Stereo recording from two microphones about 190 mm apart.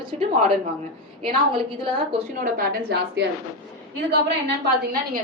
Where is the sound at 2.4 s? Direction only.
45° right (ahead or behind).